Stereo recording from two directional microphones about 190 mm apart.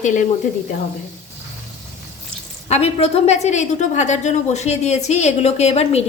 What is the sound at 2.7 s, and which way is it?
A woman's voice, 35° left (ahead or behind).